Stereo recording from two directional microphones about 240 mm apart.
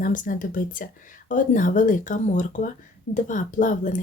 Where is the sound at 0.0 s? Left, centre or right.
Left.